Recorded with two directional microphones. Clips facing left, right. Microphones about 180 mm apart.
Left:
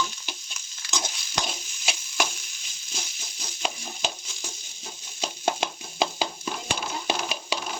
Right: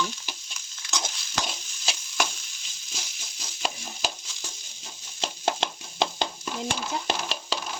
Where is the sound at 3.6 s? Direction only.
Centre (ahead or behind).